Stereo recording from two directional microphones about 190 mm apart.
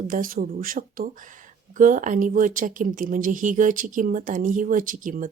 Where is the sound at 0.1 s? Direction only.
50° right (ahead or behind).